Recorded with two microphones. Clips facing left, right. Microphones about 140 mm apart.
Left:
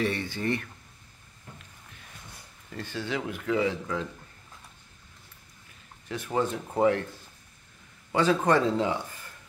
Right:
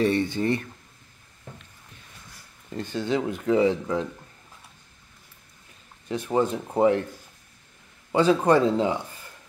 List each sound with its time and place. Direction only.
0.0 s speech: 25° right (ahead or behind)
2.7 s speech: 20° right (ahead or behind)
6.0 s speech: 25° right (ahead or behind)
8.1 s speech: 20° right (ahead or behind)